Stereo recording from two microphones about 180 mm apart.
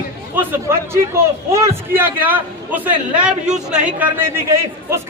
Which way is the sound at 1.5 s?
15° right (ahead or behind).